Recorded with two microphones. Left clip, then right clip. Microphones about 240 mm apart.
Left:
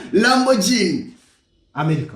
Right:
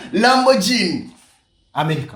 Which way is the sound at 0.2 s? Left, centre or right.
Right.